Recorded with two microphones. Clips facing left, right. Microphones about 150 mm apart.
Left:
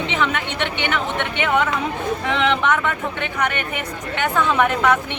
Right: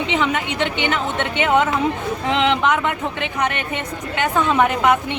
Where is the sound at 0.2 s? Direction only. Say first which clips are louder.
Right 2 dB; 20° right (ahead or behind).